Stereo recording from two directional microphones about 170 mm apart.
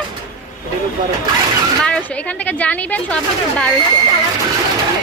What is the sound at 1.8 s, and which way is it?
A woman's voice, 10° left (ahead or behind).